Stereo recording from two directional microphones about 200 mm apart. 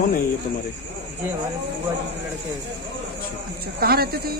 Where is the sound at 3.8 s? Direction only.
50° right (ahead or behind).